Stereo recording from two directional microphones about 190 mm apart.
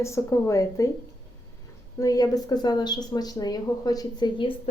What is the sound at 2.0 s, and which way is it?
A woman's voice, 20° left (ahead or behind).